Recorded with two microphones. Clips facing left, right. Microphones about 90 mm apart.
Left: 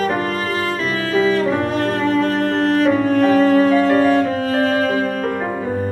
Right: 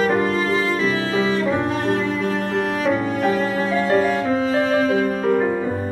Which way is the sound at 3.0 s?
70° left (ahead or behind).